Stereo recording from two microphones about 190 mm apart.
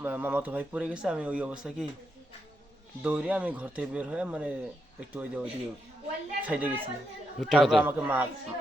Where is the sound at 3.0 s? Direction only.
5° right (ahead or behind).